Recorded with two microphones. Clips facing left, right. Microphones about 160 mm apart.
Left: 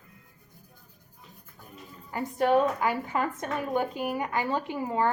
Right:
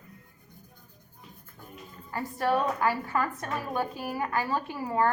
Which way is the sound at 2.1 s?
20° left (ahead or behind).